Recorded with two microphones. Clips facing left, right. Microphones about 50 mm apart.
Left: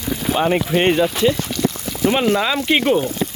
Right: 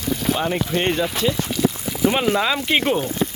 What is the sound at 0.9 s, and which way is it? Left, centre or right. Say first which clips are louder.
Speech: left 5 dB; centre.